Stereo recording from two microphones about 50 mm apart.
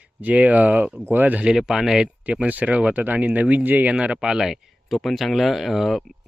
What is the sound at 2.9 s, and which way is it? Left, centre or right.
Speech, right.